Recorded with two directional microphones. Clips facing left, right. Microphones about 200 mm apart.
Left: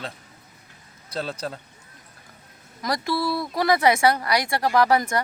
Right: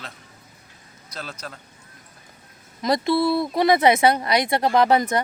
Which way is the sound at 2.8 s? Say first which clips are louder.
Right 5 dB; 20° right (ahead or behind).